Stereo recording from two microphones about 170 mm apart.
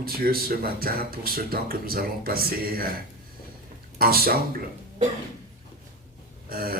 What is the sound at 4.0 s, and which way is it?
Speech, 60° right (ahead or behind).